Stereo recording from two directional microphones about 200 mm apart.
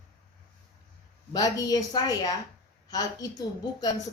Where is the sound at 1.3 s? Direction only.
20° left (ahead or behind).